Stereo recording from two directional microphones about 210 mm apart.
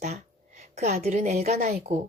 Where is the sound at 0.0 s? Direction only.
30° right (ahead or behind).